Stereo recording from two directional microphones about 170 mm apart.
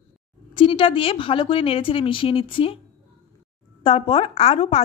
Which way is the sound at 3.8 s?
35° left (ahead or behind).